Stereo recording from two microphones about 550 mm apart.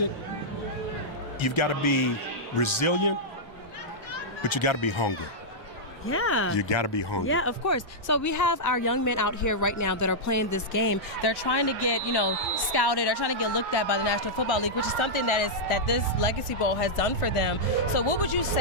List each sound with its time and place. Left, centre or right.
1.4 s speech: left
4.4 s speech: left
6.1 s speech: left
6.5 s speech: left
7.3 s speech: left